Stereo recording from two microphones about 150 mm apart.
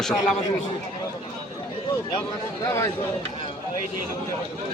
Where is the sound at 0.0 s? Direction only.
5° left (ahead or behind).